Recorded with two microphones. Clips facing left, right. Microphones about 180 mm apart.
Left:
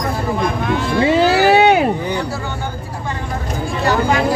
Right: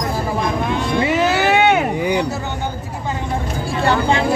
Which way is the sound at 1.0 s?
30° left (ahead or behind).